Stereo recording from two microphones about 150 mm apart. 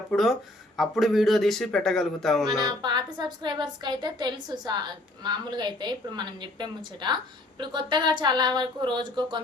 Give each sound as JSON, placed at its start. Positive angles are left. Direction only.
{"t": 0.1, "sound": "speech", "side_deg": 0}
{"t": 2.6, "sound": "speech", "side_deg": -30}